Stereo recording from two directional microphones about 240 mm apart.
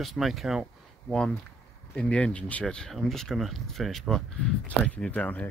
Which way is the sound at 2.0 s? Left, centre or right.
Centre.